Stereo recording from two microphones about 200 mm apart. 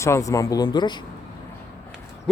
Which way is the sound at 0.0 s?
15° left (ahead or behind).